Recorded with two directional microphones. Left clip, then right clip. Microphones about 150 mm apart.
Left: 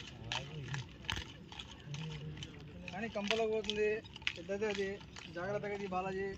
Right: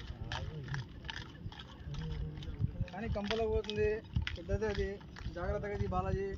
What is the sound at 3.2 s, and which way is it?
Speech, 35° left (ahead or behind).